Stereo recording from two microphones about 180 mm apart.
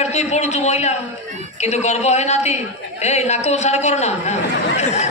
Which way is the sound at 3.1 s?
40° left (ahead or behind).